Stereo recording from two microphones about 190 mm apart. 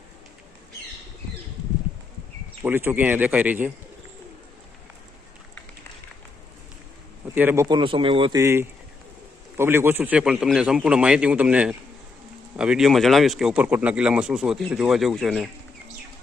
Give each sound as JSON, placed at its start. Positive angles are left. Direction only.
{"t": 2.6, "sound": "a man's voice", "side_deg": -10}
{"t": 7.3, "sound": "a man's voice", "side_deg": -10}
{"t": 8.4, "sound": "a man's voice", "side_deg": -15}